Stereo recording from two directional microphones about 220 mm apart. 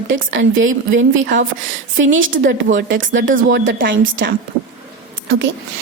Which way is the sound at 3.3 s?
40° right (ahead or behind).